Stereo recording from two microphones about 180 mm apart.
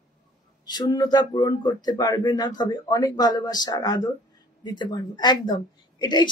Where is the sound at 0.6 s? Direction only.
20° left (ahead or behind).